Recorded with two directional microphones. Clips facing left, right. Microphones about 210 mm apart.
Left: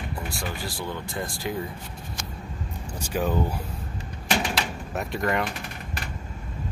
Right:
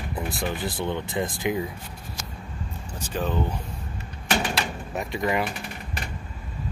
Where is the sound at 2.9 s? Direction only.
10° left (ahead or behind).